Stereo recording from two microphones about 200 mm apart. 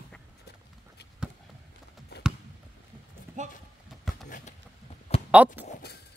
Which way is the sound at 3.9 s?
Centre (ahead or behind).